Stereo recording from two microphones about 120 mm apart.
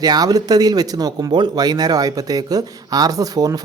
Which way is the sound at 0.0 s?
35° right (ahead or behind).